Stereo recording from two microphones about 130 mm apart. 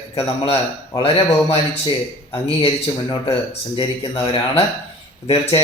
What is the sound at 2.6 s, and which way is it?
Speech, 45° left (ahead or behind).